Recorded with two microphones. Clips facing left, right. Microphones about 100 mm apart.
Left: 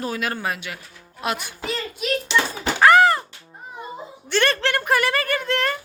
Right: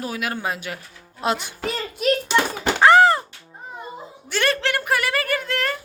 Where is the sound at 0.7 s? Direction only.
35° right (ahead or behind).